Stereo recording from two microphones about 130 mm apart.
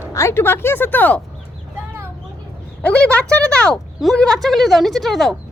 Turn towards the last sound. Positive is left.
turn(degrees=0)  # may be behind; listen again after turning